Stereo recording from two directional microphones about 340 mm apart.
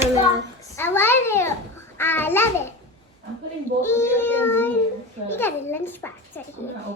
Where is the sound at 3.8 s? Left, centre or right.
Centre.